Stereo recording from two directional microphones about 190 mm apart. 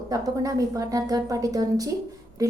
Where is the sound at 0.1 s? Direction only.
15° right (ahead or behind).